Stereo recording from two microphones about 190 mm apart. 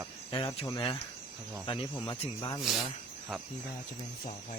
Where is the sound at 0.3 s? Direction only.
25° left (ahead or behind).